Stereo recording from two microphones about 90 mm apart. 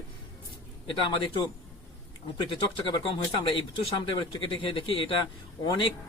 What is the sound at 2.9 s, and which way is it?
Speech, 70° left (ahead or behind).